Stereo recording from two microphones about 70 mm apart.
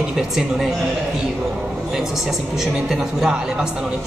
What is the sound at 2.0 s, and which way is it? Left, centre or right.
A woman's voice, centre.